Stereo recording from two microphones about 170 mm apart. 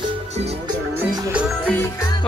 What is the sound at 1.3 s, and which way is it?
Music, 5° right (ahead or behind).